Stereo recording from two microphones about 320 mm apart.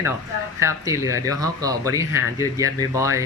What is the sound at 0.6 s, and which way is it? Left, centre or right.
Speech, centre.